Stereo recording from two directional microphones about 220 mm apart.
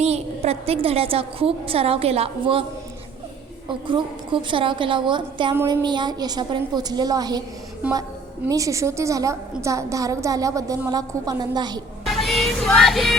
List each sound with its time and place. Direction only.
0.0 s a woman's voice: 30° right (ahead or behind)
3.7 s a woman's voice: 20° right (ahead or behind)
8.4 s a woman's voice: 15° right (ahead or behind)
12.0 s music: centre (ahead or behind)